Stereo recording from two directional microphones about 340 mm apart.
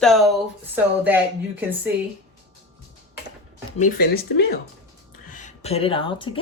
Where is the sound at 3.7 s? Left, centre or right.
Left.